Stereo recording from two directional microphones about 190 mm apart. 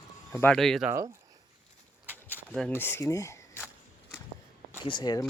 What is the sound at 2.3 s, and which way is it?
Speech, 5° left (ahead or behind).